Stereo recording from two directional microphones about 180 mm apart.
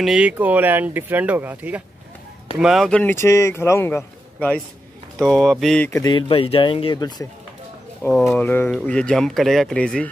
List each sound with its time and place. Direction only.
0.0 s a man's voice: 5° right (ahead or behind)
5.9 s speech: 20° left (ahead or behind)
8.1 s speech: centre (ahead or behind)
8.4 s speech: 10° left (ahead or behind)